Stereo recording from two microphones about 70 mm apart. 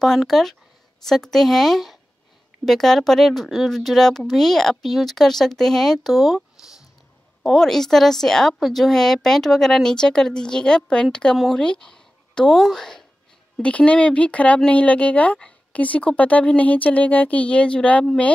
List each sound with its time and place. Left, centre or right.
0.0 s a woman's voice: centre
13.6 s a woman's voice: centre